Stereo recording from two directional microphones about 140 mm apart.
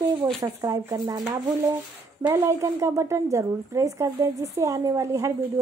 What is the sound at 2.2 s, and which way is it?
A woman's voice, 20° right (ahead or behind).